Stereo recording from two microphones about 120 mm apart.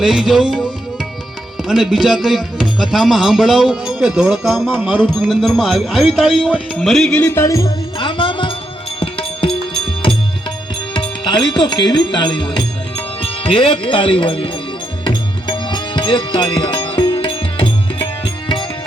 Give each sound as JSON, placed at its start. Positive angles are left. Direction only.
{"t": 0.0, "sound": "music", "side_deg": 0}
{"t": 7.9, "sound": "music", "side_deg": 45}
{"t": 13.2, "sound": "speech", "side_deg": 50}
{"t": 15.0, "sound": "music", "side_deg": 40}